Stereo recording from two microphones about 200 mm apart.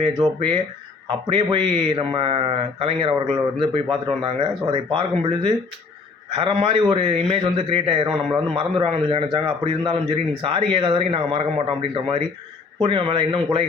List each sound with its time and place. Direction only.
0.2 s speech: 25° right (ahead or behind)